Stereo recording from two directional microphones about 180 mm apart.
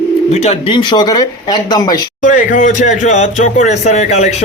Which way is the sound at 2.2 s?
45° left (ahead or behind).